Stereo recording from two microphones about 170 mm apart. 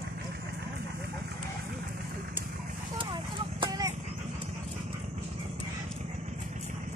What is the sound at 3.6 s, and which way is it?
Clip-clop, 20° right (ahead or behind).